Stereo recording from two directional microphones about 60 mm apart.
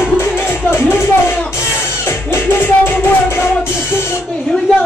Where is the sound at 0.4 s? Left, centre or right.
Left.